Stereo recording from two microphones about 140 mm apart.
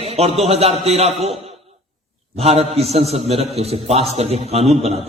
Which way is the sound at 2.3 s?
45° right (ahead or behind).